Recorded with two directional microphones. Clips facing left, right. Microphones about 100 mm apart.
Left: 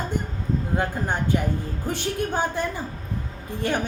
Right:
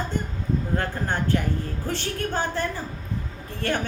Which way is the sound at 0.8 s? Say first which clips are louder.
Left 1 dB; 15° left (ahead or behind).